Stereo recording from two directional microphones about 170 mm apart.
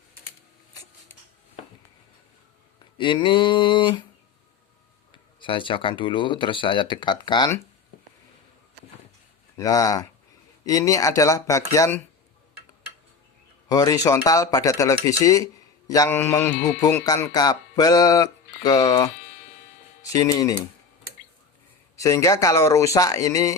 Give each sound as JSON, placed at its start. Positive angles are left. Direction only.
{"t": 3.0, "sound": "speech", "side_deg": 30}
{"t": 5.1, "sound": "speech", "side_deg": 30}
{"t": 9.6, "sound": "speech", "side_deg": 20}
{"t": 13.7, "sound": "speech", "side_deg": 20}
{"t": 15.9, "sound": "mantra", "side_deg": 15}
{"t": 16.9, "sound": "speech", "side_deg": 15}
{"t": 21.9, "sound": "speech", "side_deg": 20}